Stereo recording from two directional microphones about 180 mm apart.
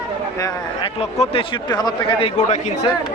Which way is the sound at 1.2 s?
25° left (ahead or behind).